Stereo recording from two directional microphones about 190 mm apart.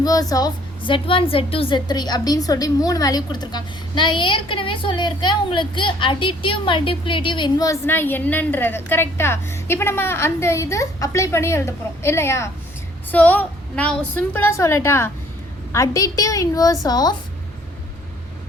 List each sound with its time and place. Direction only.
0.0 s a woman's voice: 20° left (ahead or behind)